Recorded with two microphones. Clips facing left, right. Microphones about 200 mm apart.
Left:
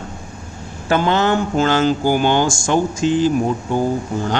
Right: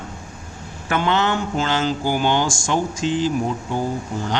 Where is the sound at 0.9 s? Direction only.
40° left (ahead or behind).